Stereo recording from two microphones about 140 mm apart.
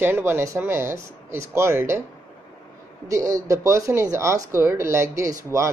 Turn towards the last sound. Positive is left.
turn(degrees=-20)  # may be behind; listen again after turning